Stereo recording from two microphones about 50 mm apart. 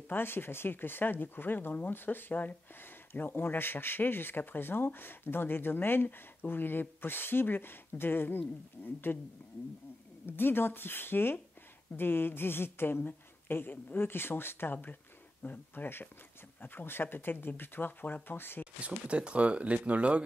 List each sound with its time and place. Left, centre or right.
0.1 s speech: left
18.8 s speech: right